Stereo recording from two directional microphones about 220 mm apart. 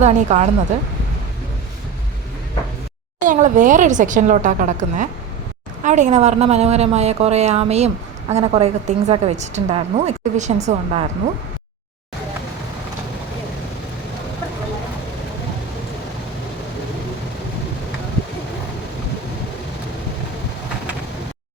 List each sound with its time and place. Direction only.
0.0 s a woman's voice: 30° right (ahead or behind)
3.2 s a woman's voice: 35° right (ahead or behind)